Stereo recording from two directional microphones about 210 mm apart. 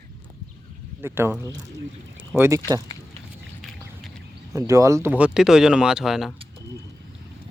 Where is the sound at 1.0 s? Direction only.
10° right (ahead or behind).